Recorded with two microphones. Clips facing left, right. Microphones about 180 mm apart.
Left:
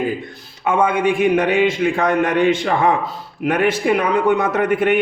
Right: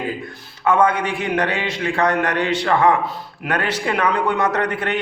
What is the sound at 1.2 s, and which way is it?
A man's voice, 15° left (ahead or behind).